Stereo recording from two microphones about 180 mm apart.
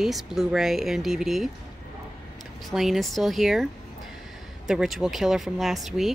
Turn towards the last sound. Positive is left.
turn(degrees=0)  # may be behind; listen again after turning